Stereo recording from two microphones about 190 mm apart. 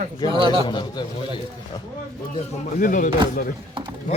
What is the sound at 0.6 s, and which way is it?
Speech, 25° left (ahead or behind).